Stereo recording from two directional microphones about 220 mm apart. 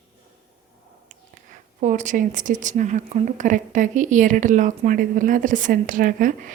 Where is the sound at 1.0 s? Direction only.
35° right (ahead or behind).